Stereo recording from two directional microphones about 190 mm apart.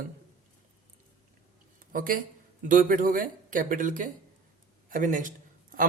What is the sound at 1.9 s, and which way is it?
A man's voice, 45° right (ahead or behind).